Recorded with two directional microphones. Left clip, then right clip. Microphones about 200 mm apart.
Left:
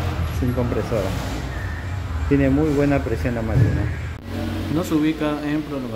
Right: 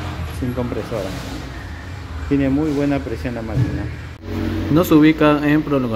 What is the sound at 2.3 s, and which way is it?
Speech, 10° right (ahead or behind).